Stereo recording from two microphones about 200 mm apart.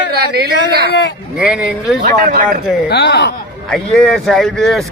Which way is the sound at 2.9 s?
55° left (ahead or behind).